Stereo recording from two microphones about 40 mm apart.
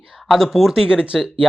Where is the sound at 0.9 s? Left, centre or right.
Centre.